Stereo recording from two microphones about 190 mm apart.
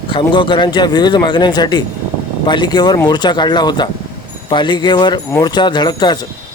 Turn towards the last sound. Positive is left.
turn(degrees=25)  # may be behind; listen again after turning